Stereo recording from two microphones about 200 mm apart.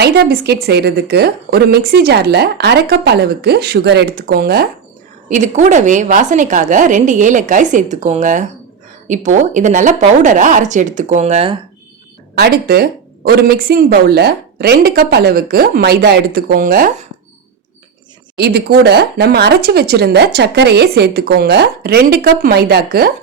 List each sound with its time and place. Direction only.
0.0 s speech: 55° right (ahead or behind)
5.3 s a woman's voice: 35° right (ahead or behind)
12.3 s speech: 50° right (ahead or behind)
18.3 s speech: 55° right (ahead or behind)